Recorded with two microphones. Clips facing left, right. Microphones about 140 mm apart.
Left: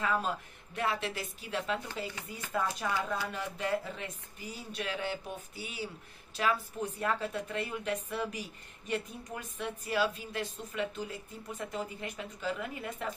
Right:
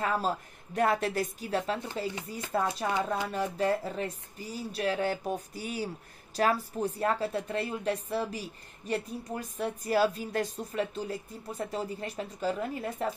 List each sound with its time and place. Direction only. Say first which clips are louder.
0.0 s a woman's voice: right 3 dB; 35° right (ahead or behind)